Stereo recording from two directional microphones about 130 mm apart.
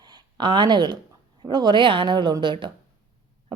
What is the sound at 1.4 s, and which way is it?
A woman's voice, 35° right (ahead or behind).